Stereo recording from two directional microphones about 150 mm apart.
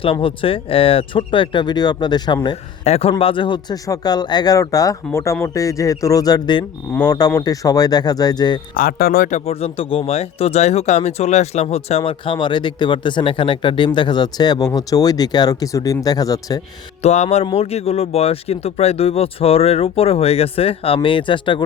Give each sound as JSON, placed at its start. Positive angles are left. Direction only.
{"t": 0.0, "sound": "speech", "side_deg": 35}
{"t": 2.8, "sound": "speech", "side_deg": 45}
{"t": 8.7, "sound": "speech", "side_deg": 80}
{"t": 9.4, "sound": "speech", "side_deg": 40}
{"t": 17.0, "sound": "speech", "side_deg": 45}